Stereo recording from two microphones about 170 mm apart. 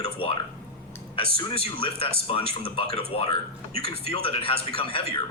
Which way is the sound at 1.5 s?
35° left (ahead or behind).